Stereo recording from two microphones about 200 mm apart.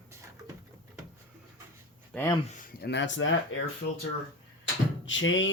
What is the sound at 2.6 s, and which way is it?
Speech, 50° left (ahead or behind).